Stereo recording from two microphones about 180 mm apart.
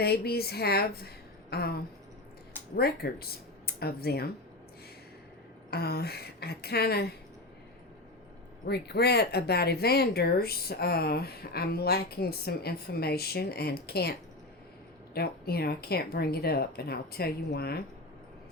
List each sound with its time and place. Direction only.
0.0 s speech: 60° left (ahead or behind)
5.7 s speech: 60° left (ahead or behind)
8.6 s speech: 65° left (ahead or behind)